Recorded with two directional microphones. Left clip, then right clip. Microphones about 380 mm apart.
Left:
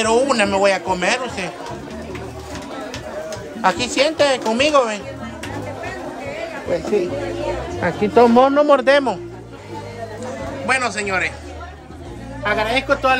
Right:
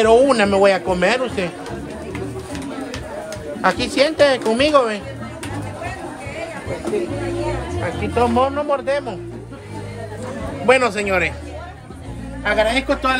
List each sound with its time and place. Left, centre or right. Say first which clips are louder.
0.0 s a man's voice: right 3 dB; centre
3.6 s a man's voice: even; centre
7.8 s speech: left 6 dB; left
10.7 s a man's voice: right 4 dB; centre
12.4 s a man's voice: right 1 dB; centre